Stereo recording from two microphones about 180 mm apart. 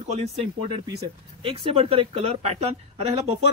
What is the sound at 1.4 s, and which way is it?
A woman's voice, 30° right (ahead or behind).